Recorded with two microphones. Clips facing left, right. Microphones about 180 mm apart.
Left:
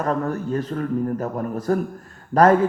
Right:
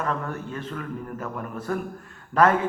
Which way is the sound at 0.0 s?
40° left (ahead or behind).